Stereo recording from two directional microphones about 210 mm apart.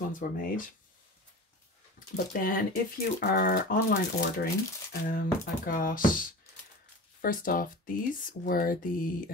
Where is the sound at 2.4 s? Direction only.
40° left (ahead or behind).